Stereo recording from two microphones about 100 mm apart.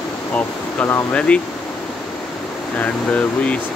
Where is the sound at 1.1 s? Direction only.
10° left (ahead or behind).